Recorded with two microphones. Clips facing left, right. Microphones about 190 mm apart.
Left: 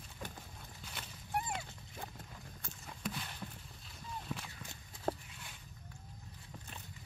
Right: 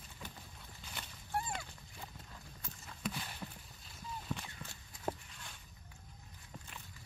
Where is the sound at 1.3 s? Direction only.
20° left (ahead or behind).